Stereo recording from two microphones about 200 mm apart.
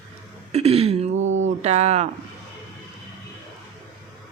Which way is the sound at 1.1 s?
75° right (ahead or behind).